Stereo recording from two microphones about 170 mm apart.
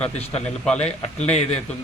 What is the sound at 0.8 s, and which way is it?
Speech, 40° left (ahead or behind).